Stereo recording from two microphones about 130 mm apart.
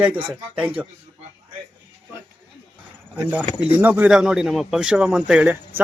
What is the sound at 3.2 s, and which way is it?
A man's voice, 15° right (ahead or behind).